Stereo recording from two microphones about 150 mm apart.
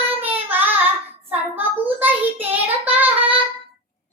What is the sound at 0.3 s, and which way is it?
Child singing, 10° right (ahead or behind).